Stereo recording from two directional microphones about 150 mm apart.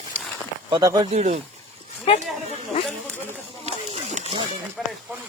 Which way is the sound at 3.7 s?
50° right (ahead or behind).